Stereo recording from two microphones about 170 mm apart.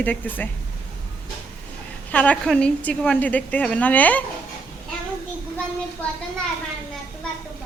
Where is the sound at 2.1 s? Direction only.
10° left (ahead or behind).